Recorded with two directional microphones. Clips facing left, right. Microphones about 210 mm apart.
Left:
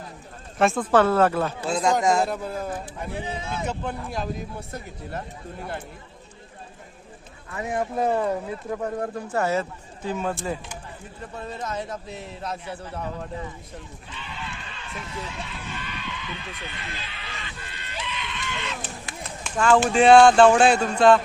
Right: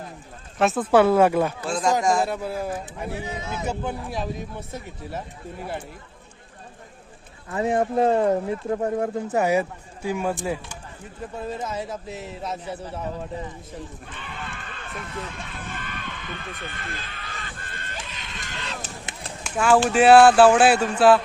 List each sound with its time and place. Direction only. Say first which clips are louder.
0.6 s speech: right 2 dB; 5° right (ahead or behind)
1.7 s speech: left 1 dB; 20° left (ahead or behind)
2.2 s speech: right 1 dB; 5° right (ahead or behind)
3.2 s speech: even; 30° left (ahead or behind)
3.7 s speech: right 2 dB; 5° right (ahead or behind)
7.5 s speech: right 5 dB; 30° right (ahead or behind); by 13.2 s 5° right (ahead or behind)
14.1 s a sound: right 1 dB; 50° right (ahead or behind)
19.4 s a sound: even; 5° right (ahead or behind)
19.9 s speech: right 1 dB; 5° right (ahead or behind)